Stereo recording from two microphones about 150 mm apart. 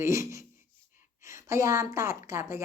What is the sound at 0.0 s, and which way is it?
A woman's voice, 20° right (ahead or behind).